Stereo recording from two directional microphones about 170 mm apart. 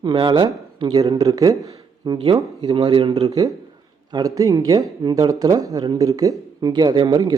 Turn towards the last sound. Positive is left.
turn(degrees=-25)  # may be behind; listen again after turning